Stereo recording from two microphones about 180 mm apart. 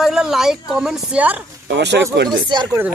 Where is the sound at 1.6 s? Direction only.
75° right (ahead or behind).